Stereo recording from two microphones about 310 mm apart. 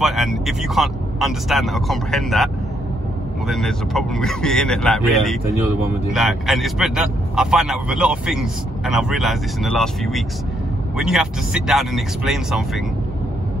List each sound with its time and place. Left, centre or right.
0.0 s speech: centre